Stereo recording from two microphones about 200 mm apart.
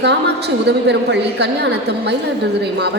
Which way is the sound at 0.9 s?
60° right (ahead or behind).